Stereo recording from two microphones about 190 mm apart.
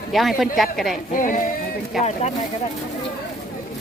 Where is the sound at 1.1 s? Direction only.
45° left (ahead or behind).